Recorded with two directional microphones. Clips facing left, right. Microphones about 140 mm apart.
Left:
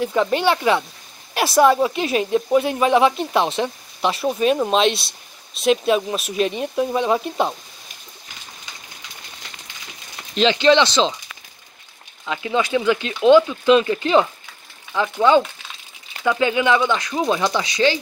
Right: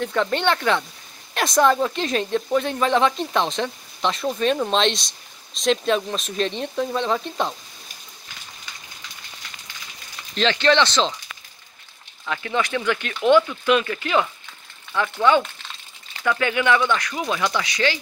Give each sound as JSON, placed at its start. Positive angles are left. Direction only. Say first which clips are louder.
{"t": 0.0, "sound": "speech", "louder": "left 3 dB", "side_deg": 5}
{"t": 10.3, "sound": "speech", "louder": "left 4 dB", "side_deg": 15}
{"t": 12.3, "sound": "speech", "louder": "left 3 dB", "side_deg": 15}
{"t": 14.9, "sound": "speech", "louder": "left 3 dB", "side_deg": 15}